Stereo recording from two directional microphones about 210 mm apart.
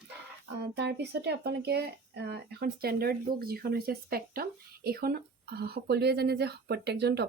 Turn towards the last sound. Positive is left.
turn(degrees=-50)  # may be behind; listen again after turning